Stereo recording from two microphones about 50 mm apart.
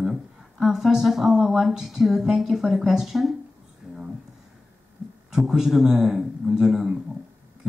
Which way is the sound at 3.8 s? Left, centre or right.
Centre.